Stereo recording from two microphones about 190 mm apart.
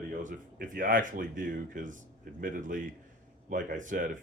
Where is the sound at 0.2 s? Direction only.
45° right (ahead or behind).